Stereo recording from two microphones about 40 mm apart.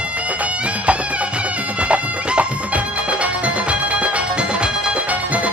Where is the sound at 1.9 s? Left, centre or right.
Right.